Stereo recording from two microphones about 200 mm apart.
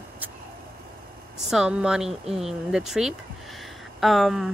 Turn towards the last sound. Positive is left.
turn(degrees=0)  # may be behind; listen again after turning